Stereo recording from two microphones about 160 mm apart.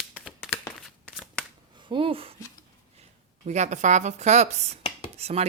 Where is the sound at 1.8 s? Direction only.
30° right (ahead or behind).